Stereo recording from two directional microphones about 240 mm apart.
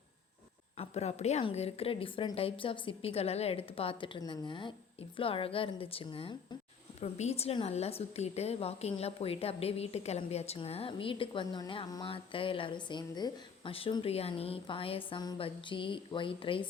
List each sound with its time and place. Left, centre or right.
0.8 s a woman's voice: left